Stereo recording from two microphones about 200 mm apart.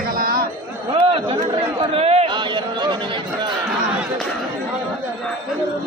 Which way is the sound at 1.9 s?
30° right (ahead or behind).